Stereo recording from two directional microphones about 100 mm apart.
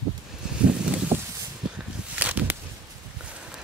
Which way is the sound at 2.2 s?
15° right (ahead or behind).